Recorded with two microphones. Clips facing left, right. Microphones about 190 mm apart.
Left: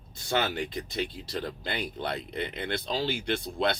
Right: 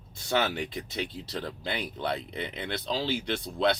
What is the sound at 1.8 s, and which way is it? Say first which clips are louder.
Speech: right 1 dB; 50° left (ahead or behind).